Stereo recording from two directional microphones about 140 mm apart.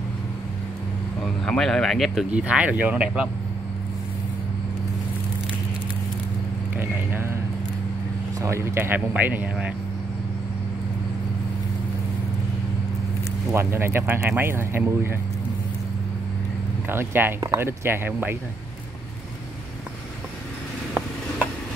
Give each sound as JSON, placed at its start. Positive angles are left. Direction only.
{"t": 1.2, "sound": "speech", "side_deg": 5}
{"t": 6.8, "sound": "a sound", "side_deg": -15}
{"t": 8.4, "sound": "speech", "side_deg": -20}
{"t": 13.5, "sound": "speech", "side_deg": -15}
{"t": 16.9, "sound": "speech", "side_deg": -15}